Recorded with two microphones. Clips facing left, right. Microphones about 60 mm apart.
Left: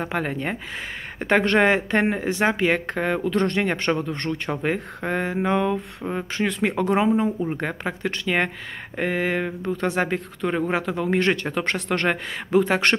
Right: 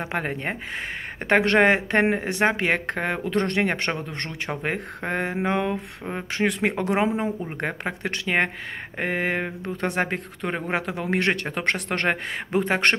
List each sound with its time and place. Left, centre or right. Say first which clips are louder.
0.1 s speech: left 1 dB; right
1.2 s speech: even; right
7.6 s speech: left 1 dB; right
8.9 s speech: left 2 dB; right
12.6 s speech: even; right